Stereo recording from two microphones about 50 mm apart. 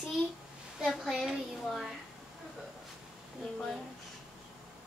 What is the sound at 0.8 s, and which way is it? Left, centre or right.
Speech, centre.